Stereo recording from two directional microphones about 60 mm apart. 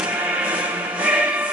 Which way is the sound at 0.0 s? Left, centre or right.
Right.